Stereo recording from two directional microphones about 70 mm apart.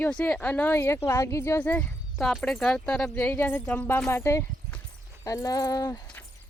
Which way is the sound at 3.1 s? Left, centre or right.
Left.